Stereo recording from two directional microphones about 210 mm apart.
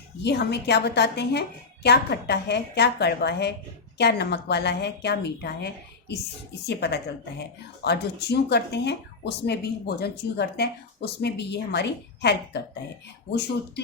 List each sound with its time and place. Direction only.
0.2 s speech: 55° left (ahead or behind)